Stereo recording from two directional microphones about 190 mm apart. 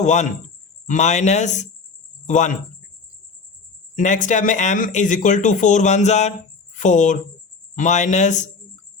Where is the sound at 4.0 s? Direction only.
40° left (ahead or behind).